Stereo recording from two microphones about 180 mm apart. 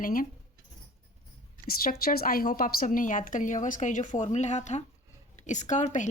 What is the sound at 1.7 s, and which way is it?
A woman's voice, 55° left (ahead or behind).